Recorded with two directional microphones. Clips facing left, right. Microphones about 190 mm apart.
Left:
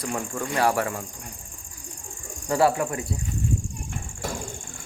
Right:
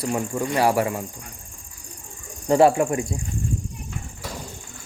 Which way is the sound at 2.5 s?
20° right (ahead or behind).